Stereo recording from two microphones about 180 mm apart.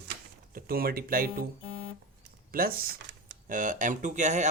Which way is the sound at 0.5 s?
55° right (ahead or behind).